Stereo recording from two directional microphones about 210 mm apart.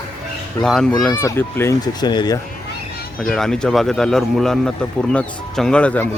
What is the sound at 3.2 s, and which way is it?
Speech, 5° left (ahead or behind).